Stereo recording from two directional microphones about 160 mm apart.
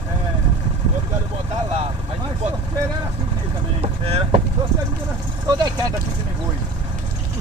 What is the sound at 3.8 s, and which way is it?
Speech, 40° right (ahead or behind).